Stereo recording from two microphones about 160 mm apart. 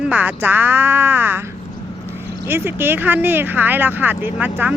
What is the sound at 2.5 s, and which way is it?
Speech, 15° right (ahead or behind).